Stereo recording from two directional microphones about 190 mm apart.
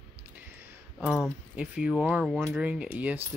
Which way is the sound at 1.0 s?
5° right (ahead or behind).